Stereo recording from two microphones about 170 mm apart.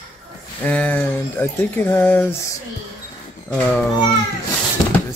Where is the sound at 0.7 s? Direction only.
10° left (ahead or behind).